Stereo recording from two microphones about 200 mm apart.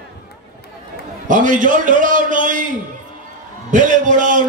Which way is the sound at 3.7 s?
40° right (ahead or behind).